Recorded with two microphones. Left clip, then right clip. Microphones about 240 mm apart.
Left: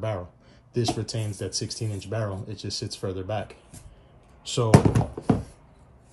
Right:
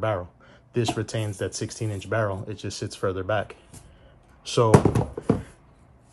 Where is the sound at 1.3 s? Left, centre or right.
Right.